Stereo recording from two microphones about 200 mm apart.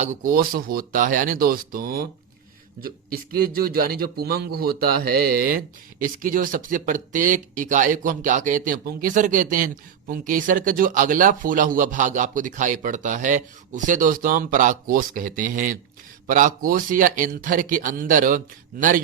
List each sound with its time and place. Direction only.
0.0 s a man's voice: 40° right (ahead or behind)